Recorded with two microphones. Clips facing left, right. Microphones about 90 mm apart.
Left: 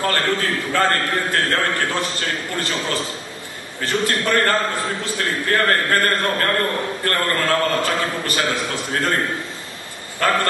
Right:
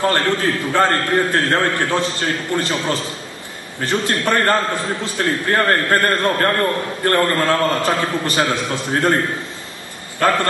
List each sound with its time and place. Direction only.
0.0 s a man's voice: 25° right (ahead or behind)